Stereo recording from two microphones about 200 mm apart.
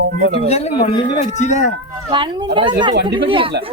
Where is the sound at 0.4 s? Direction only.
30° left (ahead or behind).